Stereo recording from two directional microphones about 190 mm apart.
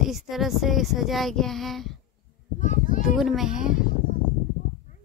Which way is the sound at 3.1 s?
Centre (ahead or behind).